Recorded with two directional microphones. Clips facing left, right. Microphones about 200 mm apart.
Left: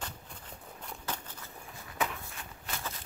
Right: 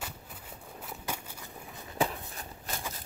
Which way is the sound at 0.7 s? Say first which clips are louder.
Right 1 dB; 10° right (ahead or behind).